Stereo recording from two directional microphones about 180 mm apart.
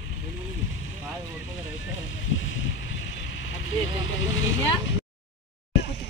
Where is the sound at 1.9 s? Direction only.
90° left.